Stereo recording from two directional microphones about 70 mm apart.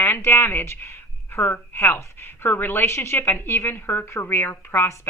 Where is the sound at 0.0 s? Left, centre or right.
Left.